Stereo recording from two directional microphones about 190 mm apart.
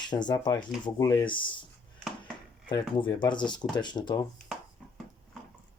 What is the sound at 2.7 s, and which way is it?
Speech, 25° left (ahead or behind).